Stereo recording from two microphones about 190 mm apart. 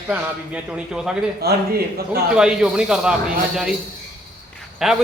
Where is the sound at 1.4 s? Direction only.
55° right (ahead or behind).